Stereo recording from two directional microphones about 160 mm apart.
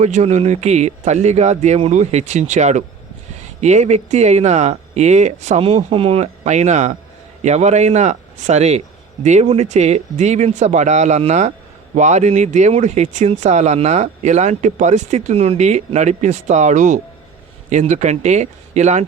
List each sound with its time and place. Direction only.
0.0 s speech: 45° right (ahead or behind)